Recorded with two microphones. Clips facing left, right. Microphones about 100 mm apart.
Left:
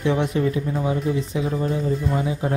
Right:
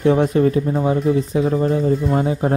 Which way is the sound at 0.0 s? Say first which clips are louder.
Right 6 dB; 40° right (ahead or behind).